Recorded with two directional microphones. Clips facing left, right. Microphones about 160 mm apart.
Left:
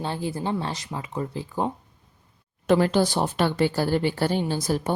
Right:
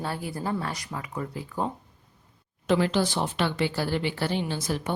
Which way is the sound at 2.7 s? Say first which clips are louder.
Left 4 dB; 45° left (ahead or behind).